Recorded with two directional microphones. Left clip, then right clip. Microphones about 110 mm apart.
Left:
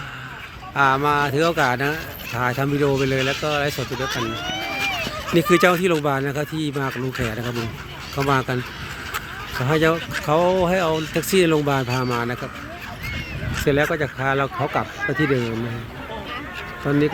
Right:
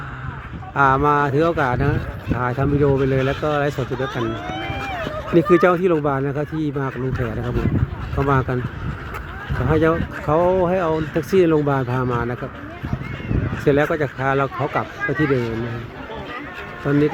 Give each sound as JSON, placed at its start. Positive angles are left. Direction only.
{"t": 0.8, "sound": "speech", "side_deg": -15}
{"t": 3.6, "sound": "speech", "side_deg": -10}
{"t": 4.0, "sound": "speech", "side_deg": 5}
{"t": 6.7, "sound": "speech", "side_deg": 15}
{"t": 9.6, "sound": "speech", "side_deg": 5}
{"t": 13.7, "sound": "speech", "side_deg": -10}
{"t": 14.8, "sound": "speech", "side_deg": 10}
{"t": 16.9, "sound": "speech", "side_deg": 25}